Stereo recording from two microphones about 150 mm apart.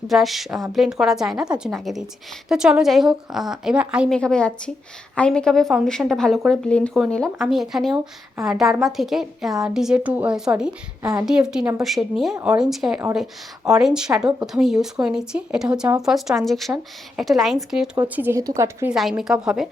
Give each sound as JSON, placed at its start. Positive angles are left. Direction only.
{"t": 0.1, "sound": "a woman's voice", "side_deg": 0}
{"t": 4.1, "sound": "a woman's voice", "side_deg": 5}
{"t": 18.1, "sound": "a woman's voice", "side_deg": -15}
{"t": 18.9, "sound": "a woman's voice", "side_deg": -5}